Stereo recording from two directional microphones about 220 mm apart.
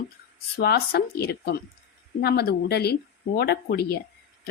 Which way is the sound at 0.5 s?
45° left (ahead or behind).